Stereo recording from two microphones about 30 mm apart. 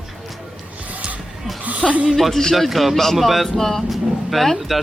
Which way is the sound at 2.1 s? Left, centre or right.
Centre.